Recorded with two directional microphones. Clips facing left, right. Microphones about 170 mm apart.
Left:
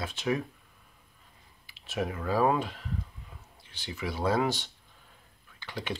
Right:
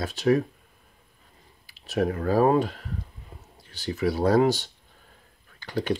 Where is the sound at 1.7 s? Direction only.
40° right (ahead or behind).